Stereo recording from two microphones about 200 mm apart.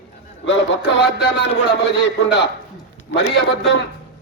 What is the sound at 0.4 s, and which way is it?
Speech, 60° left (ahead or behind).